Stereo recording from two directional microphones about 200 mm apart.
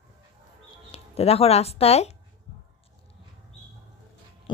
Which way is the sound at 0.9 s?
30° left (ahead or behind).